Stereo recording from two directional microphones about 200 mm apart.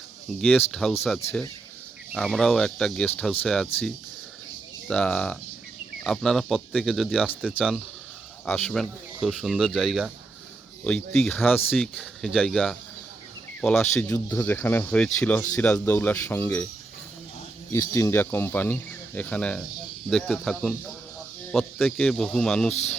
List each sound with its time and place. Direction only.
0.5 s speech: 5° left (ahead or behind)
2.1 s speech: centre (ahead or behind)
8.4 s speech: 5° left (ahead or behind)
17.7 s speech: 15° left (ahead or behind)